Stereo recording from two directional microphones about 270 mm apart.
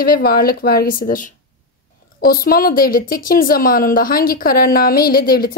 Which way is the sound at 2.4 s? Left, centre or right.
Left.